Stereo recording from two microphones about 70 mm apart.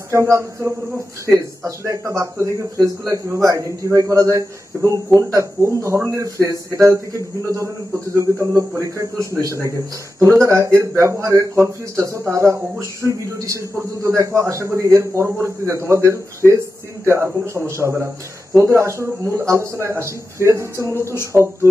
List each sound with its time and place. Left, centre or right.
0.1 s speech: right
21.0 s speech: left
21.3 s speech: right